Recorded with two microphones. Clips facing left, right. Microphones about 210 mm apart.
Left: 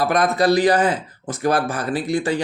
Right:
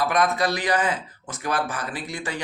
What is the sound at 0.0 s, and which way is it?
Speech, 35° left (ahead or behind).